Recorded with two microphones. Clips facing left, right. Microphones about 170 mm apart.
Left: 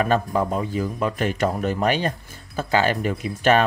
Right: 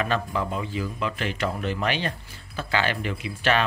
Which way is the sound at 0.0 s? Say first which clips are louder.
Left 5 dB; 45° left (ahead or behind).